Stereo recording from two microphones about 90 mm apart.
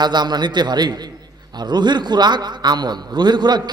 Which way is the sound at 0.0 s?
55° right (ahead or behind).